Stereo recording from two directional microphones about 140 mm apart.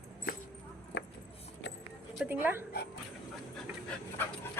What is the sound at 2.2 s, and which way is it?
Speech, 15° right (ahead or behind).